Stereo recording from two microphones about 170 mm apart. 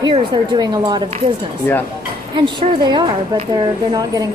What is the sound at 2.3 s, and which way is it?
A woman's voice, 25° right (ahead or behind).